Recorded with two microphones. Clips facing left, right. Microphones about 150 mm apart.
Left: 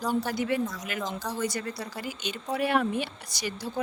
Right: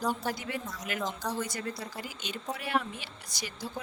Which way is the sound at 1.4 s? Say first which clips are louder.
Left 5 dB; 75° left (ahead or behind).